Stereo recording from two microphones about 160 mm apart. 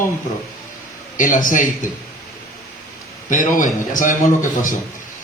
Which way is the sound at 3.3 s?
55° left (ahead or behind).